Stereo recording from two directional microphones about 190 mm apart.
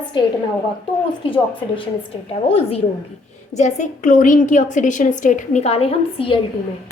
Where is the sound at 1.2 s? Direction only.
25° left (ahead or behind).